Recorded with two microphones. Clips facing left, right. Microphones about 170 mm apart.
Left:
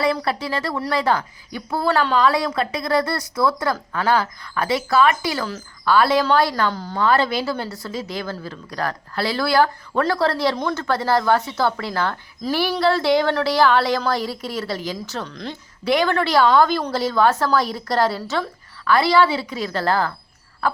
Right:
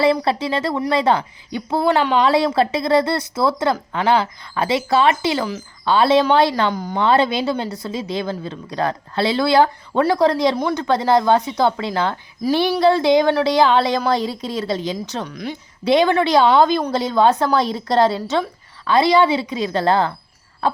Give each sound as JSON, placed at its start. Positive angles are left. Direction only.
{"t": 0.0, "sound": "a woman's voice", "side_deg": -25}
{"t": 15.8, "sound": "a woman's voice", "side_deg": -20}